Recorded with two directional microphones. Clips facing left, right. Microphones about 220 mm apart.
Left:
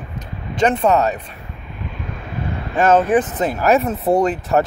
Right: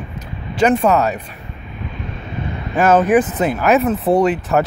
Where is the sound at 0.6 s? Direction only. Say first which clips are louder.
Right 1 dB; 30° left (ahead or behind).